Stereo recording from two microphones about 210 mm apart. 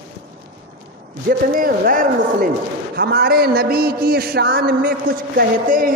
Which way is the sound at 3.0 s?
50° right (ahead or behind).